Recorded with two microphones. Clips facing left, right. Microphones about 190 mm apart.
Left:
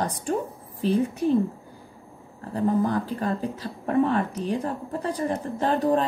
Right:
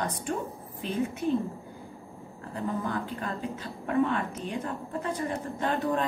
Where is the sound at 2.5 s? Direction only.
40° left (ahead or behind).